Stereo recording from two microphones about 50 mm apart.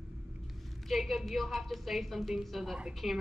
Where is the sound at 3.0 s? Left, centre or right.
Centre.